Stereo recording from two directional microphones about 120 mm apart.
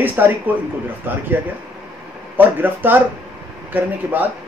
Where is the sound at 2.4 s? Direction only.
15° right (ahead or behind).